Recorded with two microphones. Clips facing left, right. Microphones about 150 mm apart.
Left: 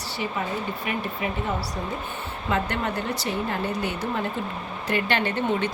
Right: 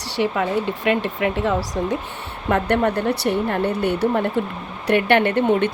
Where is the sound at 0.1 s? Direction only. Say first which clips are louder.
Right 9 dB; 80° right.